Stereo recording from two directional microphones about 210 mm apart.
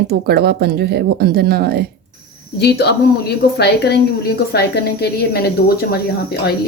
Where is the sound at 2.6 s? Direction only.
50° left (ahead or behind).